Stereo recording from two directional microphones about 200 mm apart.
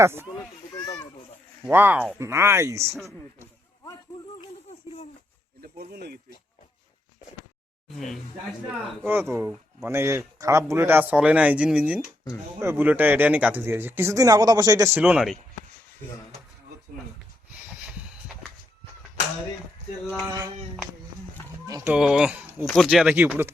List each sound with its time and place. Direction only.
0.0 s speech: 10° right (ahead or behind)
0.8 s a sound: 20° left (ahead or behind)
1.6 s speech: 10° right (ahead or behind)
5.6 s snake: 50° right (ahead or behind)
7.9 s speech: centre (ahead or behind)
9.3 s speech: 10° right (ahead or behind)
17.8 s a sound: 5° right (ahead or behind)
20.2 s speech: 15° right (ahead or behind)
21.7 s speech: 10° right (ahead or behind)